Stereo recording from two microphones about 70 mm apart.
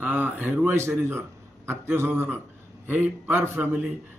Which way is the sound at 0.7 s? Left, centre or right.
Right.